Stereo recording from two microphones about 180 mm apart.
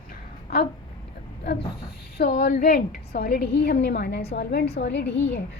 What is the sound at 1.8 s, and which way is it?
A woman's voice, 60° left (ahead or behind).